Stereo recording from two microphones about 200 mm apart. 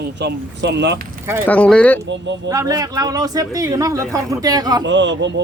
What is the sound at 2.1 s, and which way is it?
Speech, 65° right (ahead or behind).